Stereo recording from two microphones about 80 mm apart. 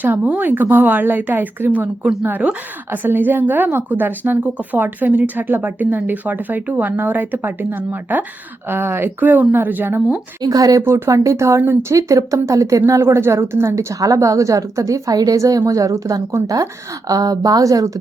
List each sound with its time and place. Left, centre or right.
0.0 s a woman's voice: right
10.4 s speech: right
10.8 s speech: right